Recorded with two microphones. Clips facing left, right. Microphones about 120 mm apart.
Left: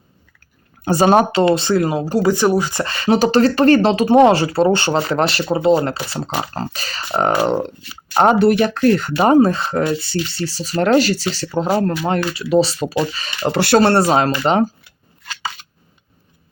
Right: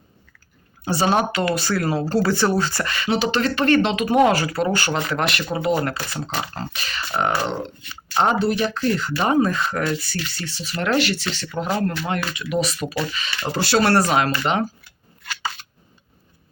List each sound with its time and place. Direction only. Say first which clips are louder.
0.9 s speech: left 7 dB; 45° left (ahead or behind)
1.3 s speech: left 7 dB; 30° left (ahead or behind)
2.8 s speech: left 6 dB; 35° left (ahead or behind)
6.4 s speech: left 4 dB; 35° left (ahead or behind)
8.1 s speech: left 7 dB; 55° left (ahead or behind); by 13.1 s 25° left (ahead or behind)
13.4 s speech: left 7 dB; 65° left (ahead or behind)
13.7 s speech: left 4 dB; 25° left (ahead or behind)